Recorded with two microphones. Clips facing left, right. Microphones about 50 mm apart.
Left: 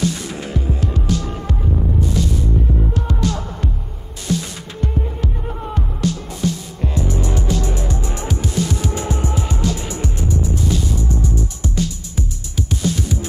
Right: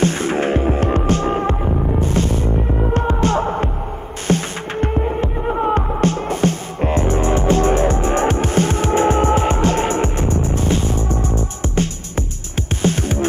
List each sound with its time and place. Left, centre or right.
0.0 s throbbing: right
4.3 s music: right